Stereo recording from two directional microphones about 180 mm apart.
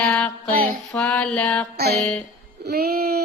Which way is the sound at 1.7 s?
60° right (ahead or behind).